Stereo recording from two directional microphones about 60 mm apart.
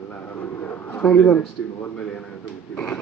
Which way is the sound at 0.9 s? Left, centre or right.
Left.